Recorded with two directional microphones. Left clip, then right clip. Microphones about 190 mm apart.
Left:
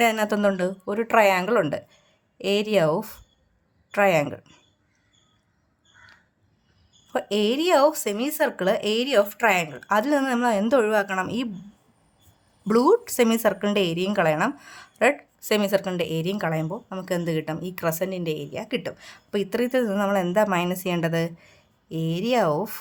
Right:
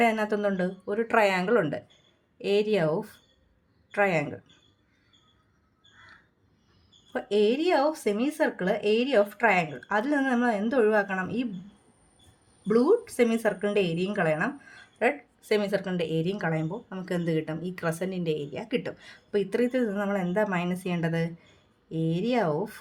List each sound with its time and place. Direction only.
0.0 s speech: 40° left (ahead or behind)
7.1 s speech: 35° left (ahead or behind)
12.6 s speech: 45° left (ahead or behind)